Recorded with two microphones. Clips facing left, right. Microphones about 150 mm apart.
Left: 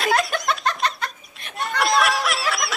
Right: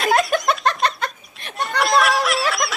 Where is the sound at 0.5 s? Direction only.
55° right (ahead or behind).